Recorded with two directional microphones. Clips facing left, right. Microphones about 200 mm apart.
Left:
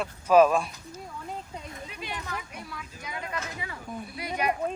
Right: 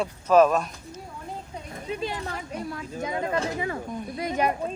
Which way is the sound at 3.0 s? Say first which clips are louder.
Right 9 dB; 25° right (ahead or behind).